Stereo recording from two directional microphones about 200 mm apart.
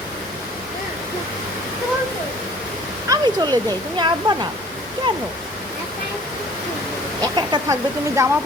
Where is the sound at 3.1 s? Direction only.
20° right (ahead or behind).